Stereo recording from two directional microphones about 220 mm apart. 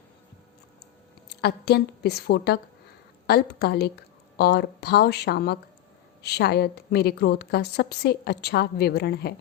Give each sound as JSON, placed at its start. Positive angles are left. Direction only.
{"t": 1.3, "sound": "a woman's voice", "side_deg": 45}